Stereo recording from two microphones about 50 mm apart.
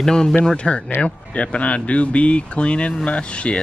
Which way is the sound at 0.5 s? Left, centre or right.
Left.